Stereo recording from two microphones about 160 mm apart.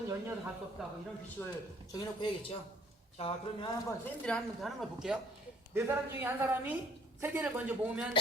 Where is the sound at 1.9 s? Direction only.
30° left (ahead or behind).